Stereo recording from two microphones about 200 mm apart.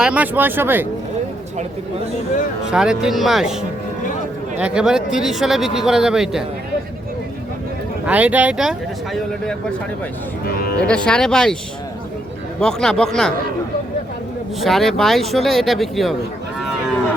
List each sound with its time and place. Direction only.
0.0 s speech: 5° right (ahead or behind)
2.6 s speech: 5° right (ahead or behind)
4.6 s speech: 5° right (ahead or behind)
8.0 s speech: 5° right (ahead or behind)
10.4 s speech: 50° left (ahead or behind)
10.8 s speech: 5° left (ahead or behind)
12.5 s speech: 5° left (ahead or behind)
14.6 s speech: centre (ahead or behind)